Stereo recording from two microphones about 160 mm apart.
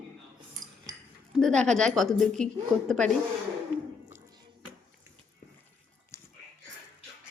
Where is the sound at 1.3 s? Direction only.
5° left (ahead or behind).